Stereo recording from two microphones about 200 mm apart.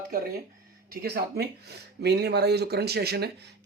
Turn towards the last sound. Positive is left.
turn(degrees=-55)  # may be behind; listen again after turning